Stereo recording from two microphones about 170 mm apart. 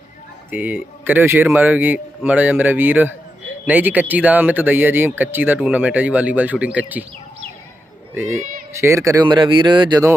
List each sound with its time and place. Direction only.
0.5 s speech: 10° right (ahead or behind)
8.7 s speech: 15° right (ahead or behind)